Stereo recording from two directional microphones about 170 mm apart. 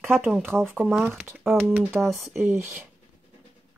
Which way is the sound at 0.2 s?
15° right (ahead or behind).